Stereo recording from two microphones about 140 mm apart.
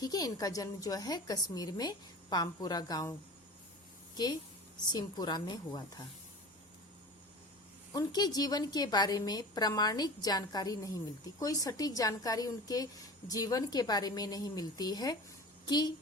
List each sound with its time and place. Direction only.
0.0 s a woman's voice: 25° left (ahead or behind)
4.9 s a woman's voice: 30° left (ahead or behind)
7.9 s a woman's voice: 30° left (ahead or behind)